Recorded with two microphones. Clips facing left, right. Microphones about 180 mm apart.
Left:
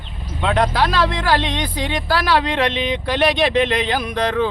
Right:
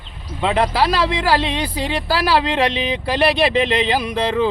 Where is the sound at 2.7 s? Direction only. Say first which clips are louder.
Even; 35° right (ahead or behind).